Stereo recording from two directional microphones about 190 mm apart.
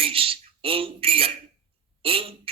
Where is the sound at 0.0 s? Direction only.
30° right (ahead or behind).